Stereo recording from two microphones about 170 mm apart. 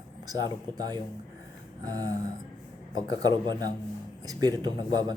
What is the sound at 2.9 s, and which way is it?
Speech, 25° right (ahead or behind).